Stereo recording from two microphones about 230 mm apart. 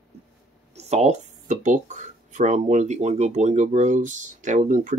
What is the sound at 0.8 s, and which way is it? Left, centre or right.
Speech, right.